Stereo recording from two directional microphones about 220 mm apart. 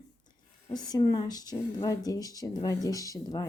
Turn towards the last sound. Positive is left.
turn(degrees=15)  # may be behind; listen again after turning